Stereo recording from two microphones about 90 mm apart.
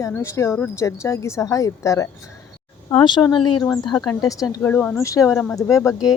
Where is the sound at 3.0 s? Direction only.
60° left (ahead or behind).